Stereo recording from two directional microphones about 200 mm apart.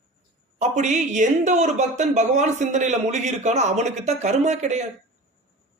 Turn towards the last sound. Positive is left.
turn(degrees=-35)  # may be behind; listen again after turning